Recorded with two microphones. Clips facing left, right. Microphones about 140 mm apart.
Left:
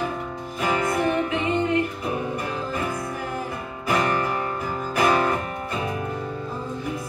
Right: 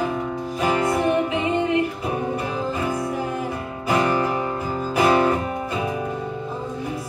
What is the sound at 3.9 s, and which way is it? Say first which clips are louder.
Guitar: right 3 dB; 25° right (ahead or behind).